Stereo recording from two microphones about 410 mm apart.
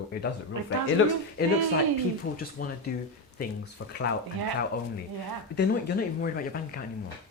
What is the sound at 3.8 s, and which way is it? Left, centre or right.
Speech, left.